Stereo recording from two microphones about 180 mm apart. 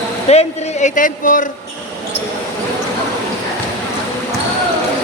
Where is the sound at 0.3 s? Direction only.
40° left (ahead or behind).